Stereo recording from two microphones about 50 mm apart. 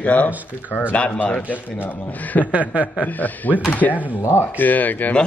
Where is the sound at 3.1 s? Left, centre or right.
Left.